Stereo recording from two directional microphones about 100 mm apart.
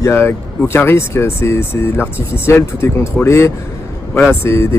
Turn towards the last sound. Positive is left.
turn(degrees=25)  # may be behind; listen again after turning